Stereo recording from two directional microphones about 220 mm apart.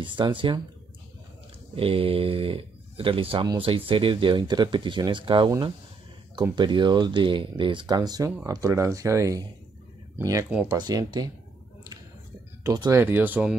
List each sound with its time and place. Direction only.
0.0 s speech: 20° right (ahead or behind)
1.8 s speech: 25° right (ahead or behind)
12.6 s speech: 15° right (ahead or behind)